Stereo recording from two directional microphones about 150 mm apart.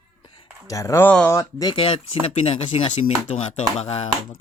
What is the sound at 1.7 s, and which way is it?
Speech, 40° left (ahead or behind).